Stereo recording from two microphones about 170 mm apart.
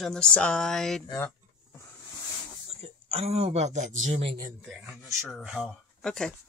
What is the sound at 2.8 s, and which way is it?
Speech, 35° right (ahead or behind).